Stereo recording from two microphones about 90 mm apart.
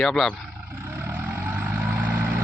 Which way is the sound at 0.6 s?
25° right (ahead or behind).